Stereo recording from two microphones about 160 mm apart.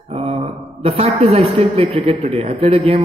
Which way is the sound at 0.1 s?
40° right (ahead or behind).